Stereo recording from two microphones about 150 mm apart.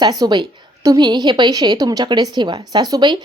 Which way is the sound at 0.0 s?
25° right (ahead or behind).